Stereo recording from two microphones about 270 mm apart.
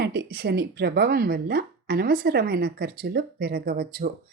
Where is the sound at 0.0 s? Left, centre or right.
Right.